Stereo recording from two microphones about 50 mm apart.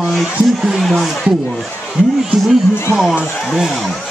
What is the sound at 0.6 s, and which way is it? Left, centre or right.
Speech, centre.